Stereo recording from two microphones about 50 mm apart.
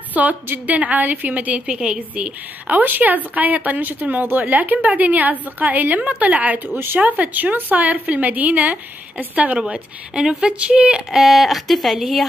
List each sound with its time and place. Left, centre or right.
0.1 s speech: right
1.7 s speech: centre
2.0 s speech: right
2.8 s speech: right; by 11.0 s centre
11.1 s speech: centre